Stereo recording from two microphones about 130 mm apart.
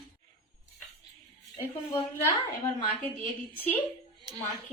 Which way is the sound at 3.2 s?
15° left (ahead or behind).